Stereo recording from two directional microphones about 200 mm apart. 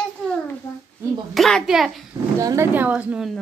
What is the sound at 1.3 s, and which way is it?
Speech, centre (ahead or behind).